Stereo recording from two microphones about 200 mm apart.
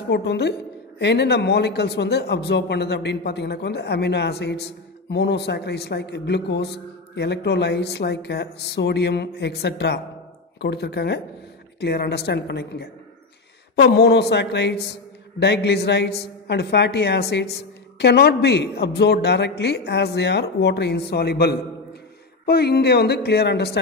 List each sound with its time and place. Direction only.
0.1 s a woman's voice: 60° left (ahead or behind)